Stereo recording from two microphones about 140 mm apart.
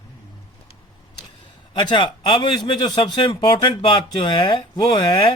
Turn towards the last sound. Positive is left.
turn(degrees=35)  # may be behind; listen again after turning